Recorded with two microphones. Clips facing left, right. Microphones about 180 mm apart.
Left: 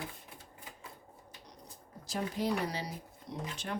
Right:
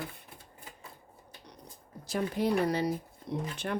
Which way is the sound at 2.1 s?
60° right (ahead or behind).